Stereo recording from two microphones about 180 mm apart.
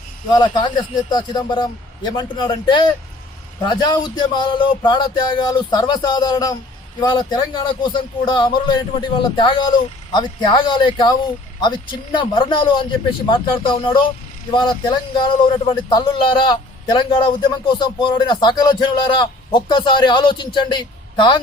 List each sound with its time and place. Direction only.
0.3 s speech: 25° left (ahead or behind)